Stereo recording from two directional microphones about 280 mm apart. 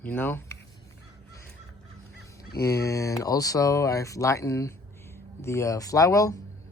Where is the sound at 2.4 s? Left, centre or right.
Left.